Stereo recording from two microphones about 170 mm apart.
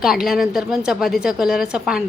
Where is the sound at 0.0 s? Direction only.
Centre (ahead or behind).